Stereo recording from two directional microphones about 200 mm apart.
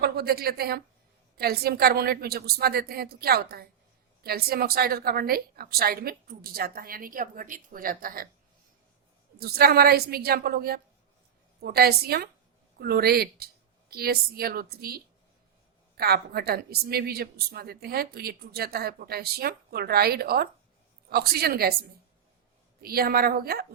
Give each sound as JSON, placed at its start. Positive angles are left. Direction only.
{"t": 0.0, "sound": "a woman's voice", "side_deg": -50}
{"t": 9.4, "sound": "a woman's voice", "side_deg": -50}
{"t": 22.8, "sound": "a woman's voice", "side_deg": -50}